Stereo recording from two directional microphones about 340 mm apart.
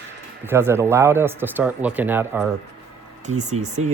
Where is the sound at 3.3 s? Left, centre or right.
Right.